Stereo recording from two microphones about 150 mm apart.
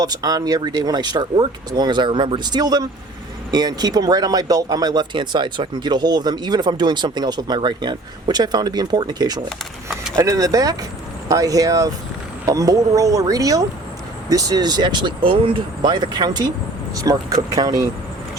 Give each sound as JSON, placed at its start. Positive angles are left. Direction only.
{"t": 0.0, "sound": "speech", "side_deg": -25}